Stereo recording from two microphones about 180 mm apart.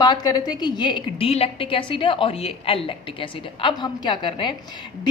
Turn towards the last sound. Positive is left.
turn(degrees=25)  # may be behind; listen again after turning